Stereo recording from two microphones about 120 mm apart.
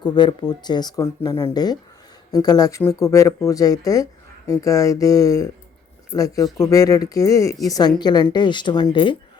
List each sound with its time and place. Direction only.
0.0 s speech: 35° left (ahead or behind)